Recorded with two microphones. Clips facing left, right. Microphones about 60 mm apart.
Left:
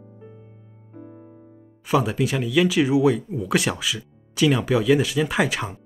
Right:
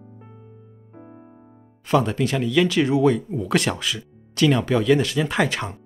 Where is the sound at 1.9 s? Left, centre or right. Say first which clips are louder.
Right 1 dB; centre.